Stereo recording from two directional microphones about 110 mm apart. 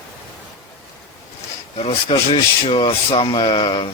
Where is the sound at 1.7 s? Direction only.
60° left (ahead or behind).